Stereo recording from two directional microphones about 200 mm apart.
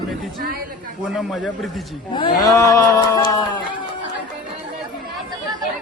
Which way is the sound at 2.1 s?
20° left (ahead or behind).